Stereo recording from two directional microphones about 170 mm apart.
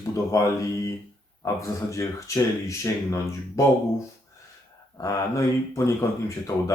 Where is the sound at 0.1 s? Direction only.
20° left (ahead or behind).